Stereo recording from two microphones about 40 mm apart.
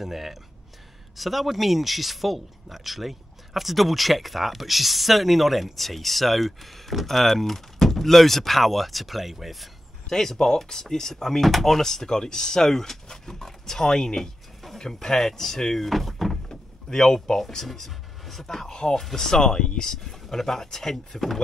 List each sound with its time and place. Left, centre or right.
0.0 s speech: centre
10.0 s speech: centre
16.4 s speech: centre
19.8 s speech: centre